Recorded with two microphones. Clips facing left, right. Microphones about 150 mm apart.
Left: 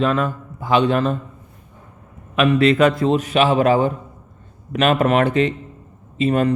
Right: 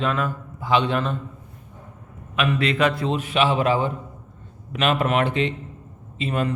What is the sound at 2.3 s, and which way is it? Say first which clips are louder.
A man's voice: left 8 dB; 40° left (ahead or behind).